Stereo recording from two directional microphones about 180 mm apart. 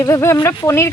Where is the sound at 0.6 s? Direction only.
15° left (ahead or behind).